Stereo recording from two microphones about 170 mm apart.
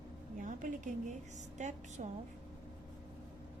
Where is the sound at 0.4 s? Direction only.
50° right (ahead or behind).